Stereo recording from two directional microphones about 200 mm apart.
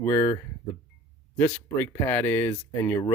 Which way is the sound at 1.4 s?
10° left (ahead or behind).